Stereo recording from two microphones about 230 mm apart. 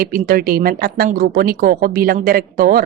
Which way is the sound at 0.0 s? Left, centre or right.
Right.